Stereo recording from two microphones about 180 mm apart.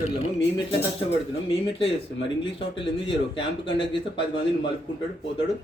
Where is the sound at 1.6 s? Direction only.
30° left (ahead or behind).